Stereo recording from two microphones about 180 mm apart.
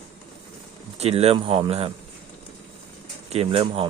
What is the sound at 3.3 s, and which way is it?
Speech, 35° right (ahead or behind).